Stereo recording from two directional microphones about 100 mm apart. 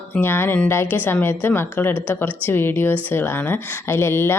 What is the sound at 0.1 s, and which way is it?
Speech, 20° left (ahead or behind).